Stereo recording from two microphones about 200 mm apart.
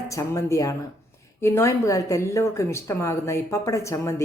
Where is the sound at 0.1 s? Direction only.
15° left (ahead or behind).